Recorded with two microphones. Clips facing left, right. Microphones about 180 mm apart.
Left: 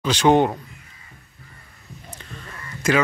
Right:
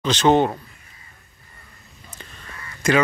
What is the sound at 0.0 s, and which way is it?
Speech, 10° left (ahead or behind).